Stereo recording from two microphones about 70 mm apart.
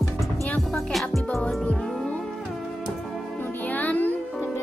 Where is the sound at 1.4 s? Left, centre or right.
Centre.